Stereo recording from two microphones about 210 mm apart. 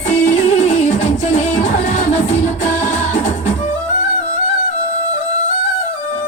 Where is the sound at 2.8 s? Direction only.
35° left (ahead or behind).